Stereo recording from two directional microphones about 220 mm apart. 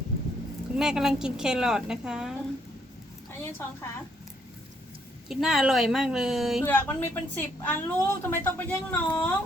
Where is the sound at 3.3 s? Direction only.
10° left (ahead or behind).